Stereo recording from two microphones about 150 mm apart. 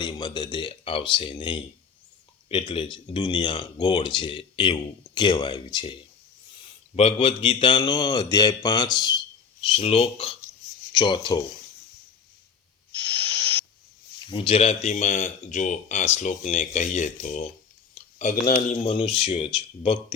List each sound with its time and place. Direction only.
0.0 s speech: 30° left (ahead or behind)
14.3 s speech: 40° left (ahead or behind); by 17.5 s 55° left (ahead or behind)
17.9 s a sound: 60° left (ahead or behind)
18.7 s speech: 45° left (ahead or behind)